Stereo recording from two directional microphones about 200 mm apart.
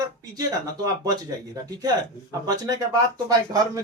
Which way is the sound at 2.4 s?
20° right (ahead or behind).